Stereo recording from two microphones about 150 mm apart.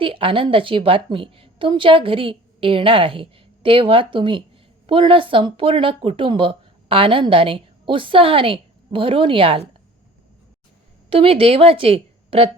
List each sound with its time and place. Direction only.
0.0 s a woman's voice: 35° right (ahead or behind)
11.1 s a woman's voice: 40° right (ahead or behind)